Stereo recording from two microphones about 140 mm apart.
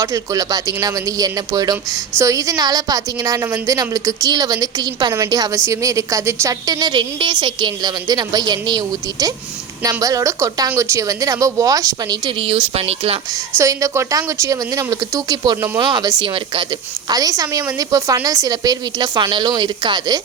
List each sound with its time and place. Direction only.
0.0 s speech: 25° right (ahead or behind)
12.4 s speech: 40° right (ahead or behind)
13.6 s speech: 25° right (ahead or behind)
17.1 s speech: 25° right (ahead or behind)